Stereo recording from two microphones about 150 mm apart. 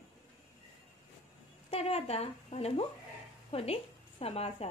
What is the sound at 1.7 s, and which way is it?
Speech, 40° left (ahead or behind).